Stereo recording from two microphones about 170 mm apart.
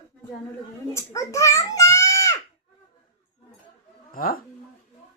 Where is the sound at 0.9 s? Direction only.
20° left (ahead or behind).